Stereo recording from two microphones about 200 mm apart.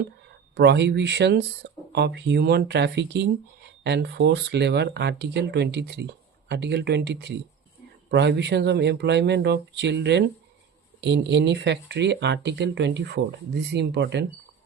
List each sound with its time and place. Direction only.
0.5 s speech: 55° right (ahead or behind)